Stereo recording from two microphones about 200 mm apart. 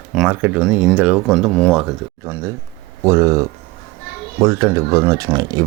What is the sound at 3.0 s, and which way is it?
Speech, 15° right (ahead or behind).